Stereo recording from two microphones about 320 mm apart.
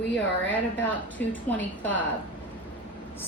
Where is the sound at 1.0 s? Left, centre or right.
Centre.